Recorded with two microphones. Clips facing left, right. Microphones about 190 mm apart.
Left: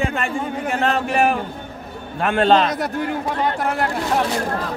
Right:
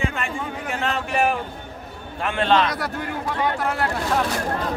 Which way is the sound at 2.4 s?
40° left (ahead or behind).